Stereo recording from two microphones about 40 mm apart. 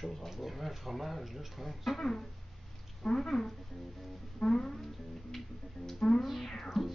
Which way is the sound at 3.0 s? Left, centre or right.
Centre.